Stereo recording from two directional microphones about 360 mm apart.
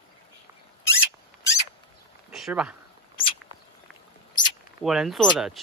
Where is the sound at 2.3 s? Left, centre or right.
Centre.